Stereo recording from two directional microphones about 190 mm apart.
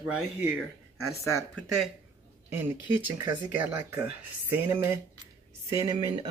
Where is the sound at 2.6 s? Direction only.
10° right (ahead or behind).